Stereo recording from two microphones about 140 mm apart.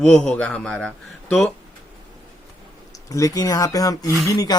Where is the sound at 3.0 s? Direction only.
25° left (ahead or behind).